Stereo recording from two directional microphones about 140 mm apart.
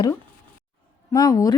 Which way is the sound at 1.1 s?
25° left (ahead or behind).